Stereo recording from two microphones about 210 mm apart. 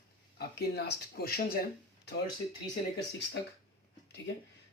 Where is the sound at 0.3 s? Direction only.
50° left (ahead or behind).